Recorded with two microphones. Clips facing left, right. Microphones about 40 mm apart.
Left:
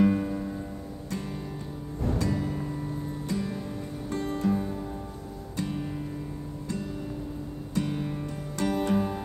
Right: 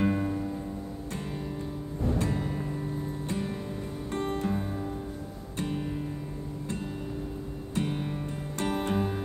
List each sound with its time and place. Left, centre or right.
0.1 s music: centre
1.1 s music: right
5.6 s music: right
7.7 s music: right